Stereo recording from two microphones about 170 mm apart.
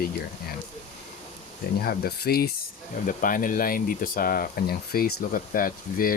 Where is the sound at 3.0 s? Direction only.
55° left (ahead or behind).